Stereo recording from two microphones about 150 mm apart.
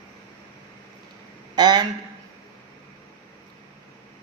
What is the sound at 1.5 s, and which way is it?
Speech, 30° right (ahead or behind).